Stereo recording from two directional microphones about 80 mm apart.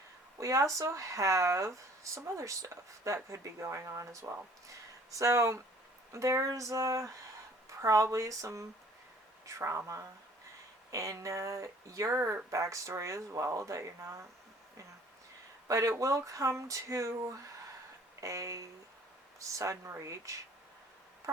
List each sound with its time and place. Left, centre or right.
0.3 s speech: right
15.6 s speech: right